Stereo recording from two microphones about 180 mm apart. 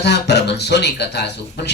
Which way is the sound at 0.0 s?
70° left (ahead or behind).